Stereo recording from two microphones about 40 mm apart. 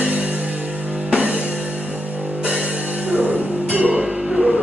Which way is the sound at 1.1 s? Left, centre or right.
Right.